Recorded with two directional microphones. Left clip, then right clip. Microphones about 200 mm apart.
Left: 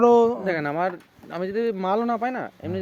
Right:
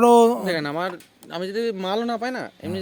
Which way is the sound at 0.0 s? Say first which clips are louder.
Right 2 dB; 65° right (ahead or behind).